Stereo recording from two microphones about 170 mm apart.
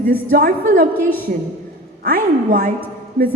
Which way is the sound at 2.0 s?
60° right (ahead or behind).